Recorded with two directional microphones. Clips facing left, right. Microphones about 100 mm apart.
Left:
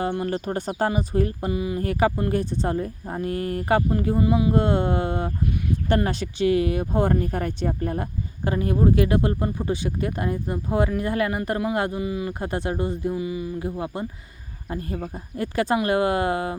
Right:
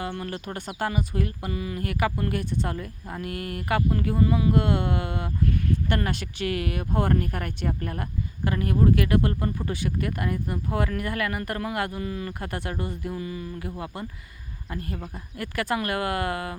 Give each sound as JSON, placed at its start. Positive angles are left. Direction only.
{"t": 0.0, "sound": "speech", "side_deg": 30}
{"t": 1.5, "sound": "speech", "side_deg": 20}
{"t": 1.8, "sound": "speech", "side_deg": 30}
{"t": 4.5, "sound": "speech", "side_deg": 30}
{"t": 12.0, "sound": "a sound", "side_deg": 15}
{"t": 12.3, "sound": "speech", "side_deg": 25}
{"t": 13.1, "sound": "a sound", "side_deg": 15}
{"t": 13.6, "sound": "speech", "side_deg": 25}
{"t": 15.4, "sound": "speech", "side_deg": 25}